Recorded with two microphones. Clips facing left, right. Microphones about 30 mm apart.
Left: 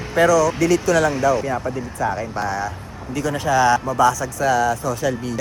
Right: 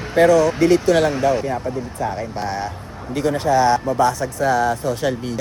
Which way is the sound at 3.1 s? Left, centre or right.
Right.